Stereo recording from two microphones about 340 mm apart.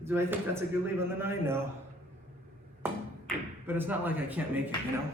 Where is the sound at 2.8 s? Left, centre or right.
Centre.